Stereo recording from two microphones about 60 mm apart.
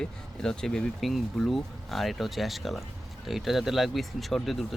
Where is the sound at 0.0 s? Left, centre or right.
Centre.